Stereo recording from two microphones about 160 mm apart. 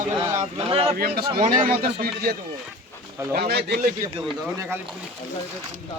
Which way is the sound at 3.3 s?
85° right.